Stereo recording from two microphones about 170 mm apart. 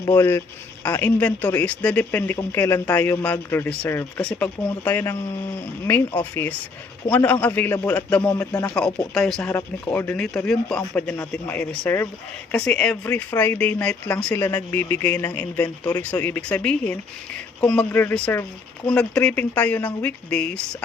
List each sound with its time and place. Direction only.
0.0 s speech: 15° left (ahead or behind)
8.3 s speech: 20° left (ahead or behind)
8.6 s speech: 5° left (ahead or behind)
9.4 s speech: 15° left (ahead or behind)